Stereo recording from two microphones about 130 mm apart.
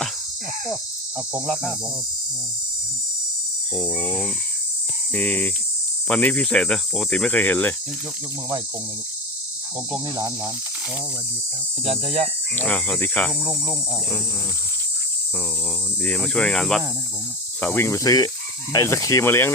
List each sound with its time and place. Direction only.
3.8 s speech: 5° right (ahead or behind)
5.1 s speech: 10° left (ahead or behind)
10.2 s speech: 25° right (ahead or behind)
11.9 s speech: 50° right (ahead or behind)
12.5 s speech: 10° left (ahead or behind)
16.0 s speech: 5° left (ahead or behind)